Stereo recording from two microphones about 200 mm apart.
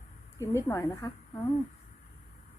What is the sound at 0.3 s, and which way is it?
Speech, 15° left (ahead or behind).